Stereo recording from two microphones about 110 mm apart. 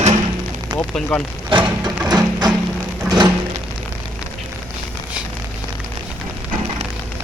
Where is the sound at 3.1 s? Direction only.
40° right (ahead or behind).